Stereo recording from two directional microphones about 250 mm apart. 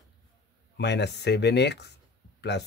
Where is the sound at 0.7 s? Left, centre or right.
Left.